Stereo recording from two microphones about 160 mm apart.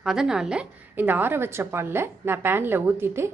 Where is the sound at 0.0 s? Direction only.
5° right (ahead or behind).